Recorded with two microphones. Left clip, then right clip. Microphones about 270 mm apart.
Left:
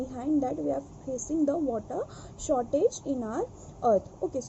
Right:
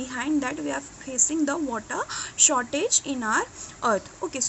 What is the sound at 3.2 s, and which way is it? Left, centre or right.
Speech, right.